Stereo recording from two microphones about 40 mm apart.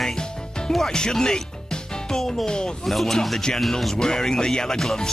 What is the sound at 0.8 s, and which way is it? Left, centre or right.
Speech, centre.